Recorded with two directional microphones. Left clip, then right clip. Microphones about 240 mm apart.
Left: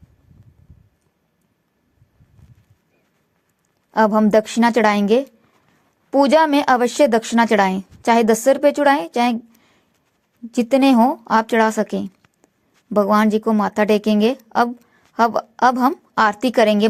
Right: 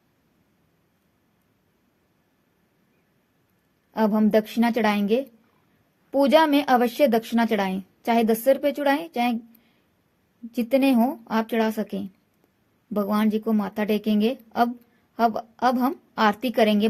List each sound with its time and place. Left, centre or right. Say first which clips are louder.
3.9 s a woman's voice: left 7 dB; centre
10.5 s a woman's voice: left 6 dB; centre